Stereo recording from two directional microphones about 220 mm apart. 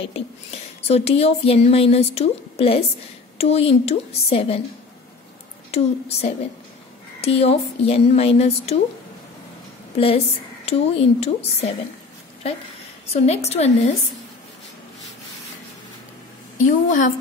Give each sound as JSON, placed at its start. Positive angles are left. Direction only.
{"t": 0.0, "sound": "speech", "side_deg": 30}
{"t": 5.7, "sound": "speech", "side_deg": 30}
{"t": 9.9, "sound": "speech", "side_deg": 25}
{"t": 13.1, "sound": "speech", "side_deg": 30}
{"t": 16.5, "sound": "a woman's voice", "side_deg": 35}